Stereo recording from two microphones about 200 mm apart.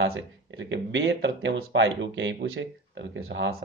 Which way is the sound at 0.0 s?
65° right (ahead or behind).